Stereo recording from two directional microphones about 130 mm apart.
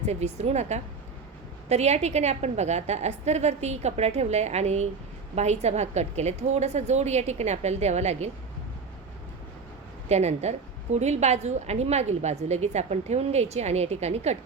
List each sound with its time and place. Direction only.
0.0 s a woman's voice: 60° right (ahead or behind)
10.1 s a woman's voice: 60° right (ahead or behind)